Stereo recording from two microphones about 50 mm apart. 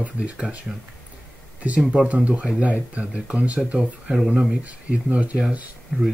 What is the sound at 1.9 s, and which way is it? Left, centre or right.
Speech, right.